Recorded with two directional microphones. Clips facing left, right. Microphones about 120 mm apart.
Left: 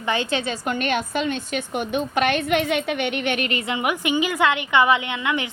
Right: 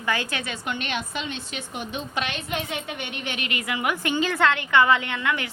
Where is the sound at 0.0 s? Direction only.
25° left (ahead or behind); by 3.4 s 65° left (ahead or behind).